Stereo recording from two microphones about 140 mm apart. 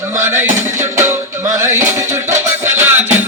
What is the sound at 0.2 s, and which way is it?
Music, 15° right (ahead or behind).